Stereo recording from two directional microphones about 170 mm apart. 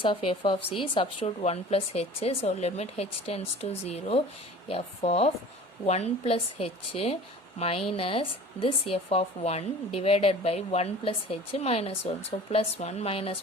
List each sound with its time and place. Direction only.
0.0 s a woman's voice: 30° left (ahead or behind)